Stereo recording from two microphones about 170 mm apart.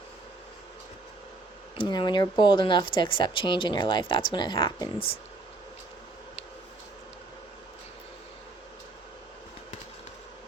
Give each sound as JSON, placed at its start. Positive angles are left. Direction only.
{"t": 1.8, "sound": "speech", "side_deg": 25}